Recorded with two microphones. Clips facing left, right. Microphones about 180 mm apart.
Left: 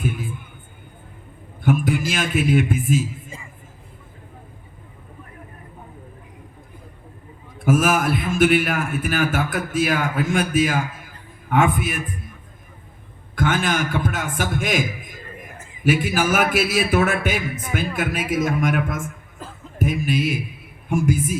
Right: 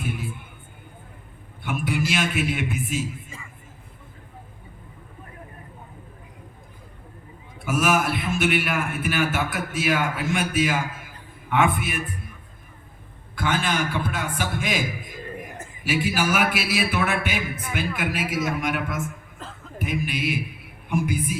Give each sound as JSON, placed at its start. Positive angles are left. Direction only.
{"t": 0.0, "sound": "music", "side_deg": 45}
{"t": 1.6, "sound": "a man's voice", "side_deg": 45}
{"t": 7.6, "sound": "a man's voice", "side_deg": 45}
{"t": 13.3, "sound": "a man's voice", "side_deg": 50}
{"t": 19.4, "sound": "a sound", "side_deg": 10}
{"t": 19.8, "sound": "a man's voice", "side_deg": 45}